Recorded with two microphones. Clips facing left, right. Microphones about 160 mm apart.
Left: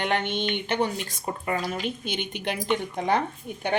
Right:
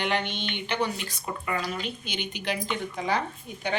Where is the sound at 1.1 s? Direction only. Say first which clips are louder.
Left 2 dB; 40° left (ahead or behind).